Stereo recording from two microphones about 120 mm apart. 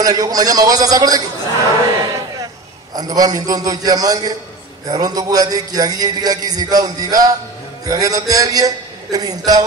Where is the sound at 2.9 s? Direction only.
35° right (ahead or behind).